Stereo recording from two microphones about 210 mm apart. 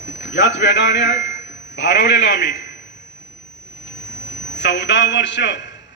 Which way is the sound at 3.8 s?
60° left (ahead or behind).